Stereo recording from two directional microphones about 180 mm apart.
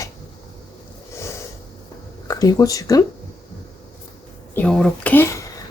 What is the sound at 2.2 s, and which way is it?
Speech, 20° left (ahead or behind).